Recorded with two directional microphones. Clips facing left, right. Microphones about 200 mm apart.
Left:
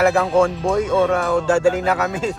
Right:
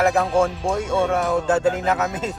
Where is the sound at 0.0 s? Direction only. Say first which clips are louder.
Left 3 dB; centre (ahead or behind).